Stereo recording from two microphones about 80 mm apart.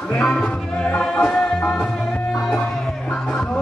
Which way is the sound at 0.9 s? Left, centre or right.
Centre.